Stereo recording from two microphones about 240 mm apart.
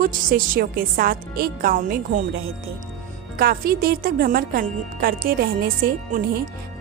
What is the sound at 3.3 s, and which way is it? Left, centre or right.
A woman's voice, right.